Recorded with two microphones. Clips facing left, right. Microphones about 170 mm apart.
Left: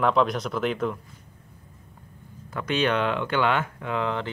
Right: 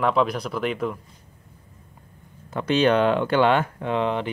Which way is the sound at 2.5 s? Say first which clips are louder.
Right 5 dB; 30° right (ahead or behind).